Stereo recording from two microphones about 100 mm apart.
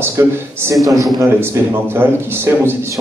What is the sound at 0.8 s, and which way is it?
Speech, centre (ahead or behind).